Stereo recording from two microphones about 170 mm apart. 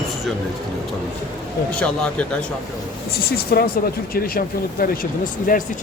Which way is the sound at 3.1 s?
65° left (ahead or behind).